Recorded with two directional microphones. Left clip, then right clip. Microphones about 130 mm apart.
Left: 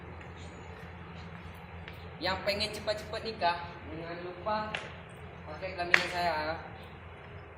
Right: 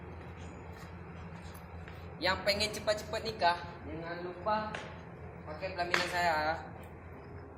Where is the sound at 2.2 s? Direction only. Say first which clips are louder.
Right 1 dB; centre (ahead or behind).